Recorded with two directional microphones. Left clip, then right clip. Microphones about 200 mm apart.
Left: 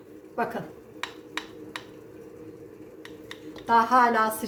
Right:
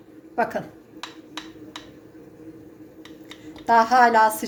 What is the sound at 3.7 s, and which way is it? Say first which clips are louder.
Speech: right 4 dB; 35° right (ahead or behind).